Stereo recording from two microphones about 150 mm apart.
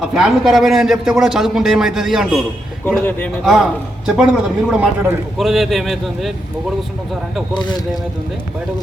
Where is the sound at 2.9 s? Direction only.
10° left (ahead or behind).